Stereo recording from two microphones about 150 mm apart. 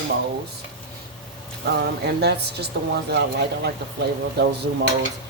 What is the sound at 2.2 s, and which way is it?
Speech, 90° right.